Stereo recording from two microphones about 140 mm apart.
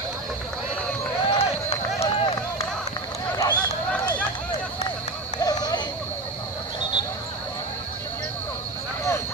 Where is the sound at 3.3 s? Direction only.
30° left (ahead or behind).